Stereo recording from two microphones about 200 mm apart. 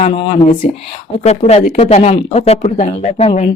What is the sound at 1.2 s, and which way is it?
A woman's voice, 30° left (ahead or behind).